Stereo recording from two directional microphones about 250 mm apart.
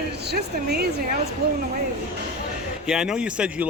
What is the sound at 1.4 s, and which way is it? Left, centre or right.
Speech, right.